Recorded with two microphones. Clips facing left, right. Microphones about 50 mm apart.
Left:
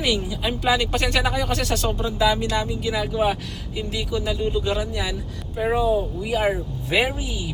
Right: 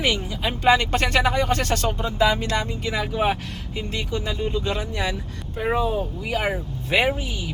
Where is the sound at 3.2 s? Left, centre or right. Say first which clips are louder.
Left 1 dB; centre.